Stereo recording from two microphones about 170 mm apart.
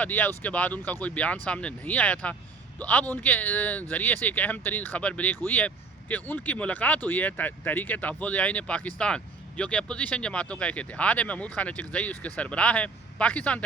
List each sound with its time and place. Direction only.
0.0 s speech: 10° left (ahead or behind)